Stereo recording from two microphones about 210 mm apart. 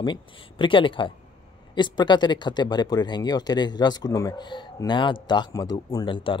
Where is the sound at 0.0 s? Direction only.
20° left (ahead or behind).